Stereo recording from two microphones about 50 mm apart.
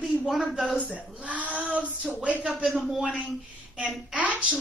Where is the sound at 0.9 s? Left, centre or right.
Right.